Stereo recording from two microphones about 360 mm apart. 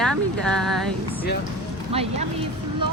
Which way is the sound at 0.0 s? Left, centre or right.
Centre.